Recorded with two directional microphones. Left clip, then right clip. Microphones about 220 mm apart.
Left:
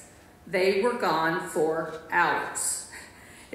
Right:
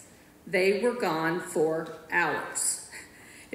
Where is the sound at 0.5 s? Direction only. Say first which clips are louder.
Left 1 dB; 35° right (ahead or behind).